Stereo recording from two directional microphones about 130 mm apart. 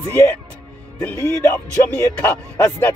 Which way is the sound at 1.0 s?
15° left (ahead or behind).